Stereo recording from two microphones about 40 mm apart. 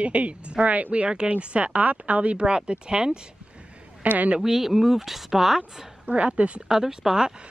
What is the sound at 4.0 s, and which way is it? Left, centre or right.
Speech, right.